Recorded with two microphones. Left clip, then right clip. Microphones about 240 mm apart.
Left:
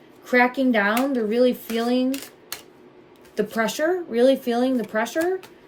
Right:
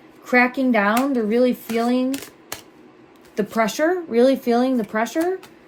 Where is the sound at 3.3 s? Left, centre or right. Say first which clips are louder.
Right 3 dB; right.